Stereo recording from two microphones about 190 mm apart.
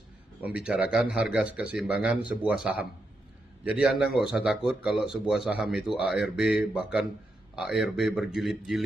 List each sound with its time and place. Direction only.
0.4 s speech: 5° right (ahead or behind)